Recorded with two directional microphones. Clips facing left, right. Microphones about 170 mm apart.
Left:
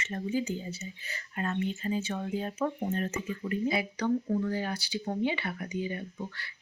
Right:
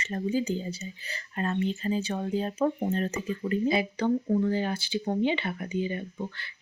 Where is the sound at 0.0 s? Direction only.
35° right (ahead or behind).